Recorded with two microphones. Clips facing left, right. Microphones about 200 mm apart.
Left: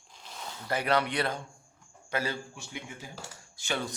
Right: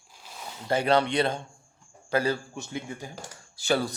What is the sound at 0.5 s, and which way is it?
A man's voice, 25° right (ahead or behind).